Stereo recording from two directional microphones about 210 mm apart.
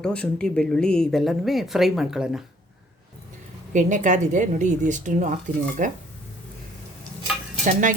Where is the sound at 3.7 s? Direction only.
35° right (ahead or behind).